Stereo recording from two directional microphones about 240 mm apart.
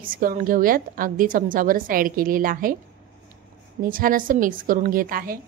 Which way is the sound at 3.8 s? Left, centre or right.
Right.